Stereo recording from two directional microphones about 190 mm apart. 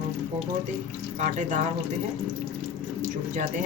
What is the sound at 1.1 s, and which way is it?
Speech, 40° right (ahead or behind).